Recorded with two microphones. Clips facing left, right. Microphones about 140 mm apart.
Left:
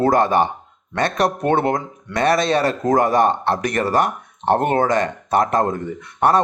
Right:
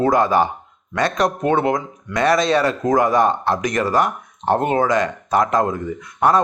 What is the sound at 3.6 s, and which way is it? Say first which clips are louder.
Speech: even; 60° left (ahead or behind).